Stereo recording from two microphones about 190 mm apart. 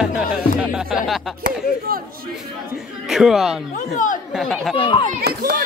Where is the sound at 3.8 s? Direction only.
40° left (ahead or behind).